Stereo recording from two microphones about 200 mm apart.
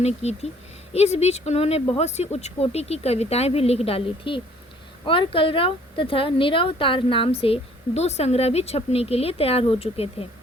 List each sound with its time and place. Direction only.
0.0 s speech: 30° left (ahead or behind)